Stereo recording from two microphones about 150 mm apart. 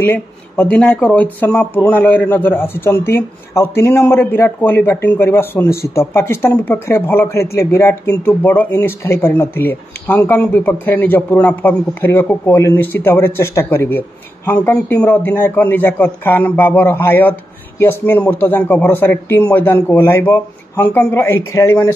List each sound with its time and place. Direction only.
0.0 s speech: 10° left (ahead or behind)